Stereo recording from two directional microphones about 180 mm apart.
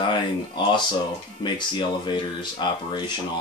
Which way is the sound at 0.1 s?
25° left (ahead or behind).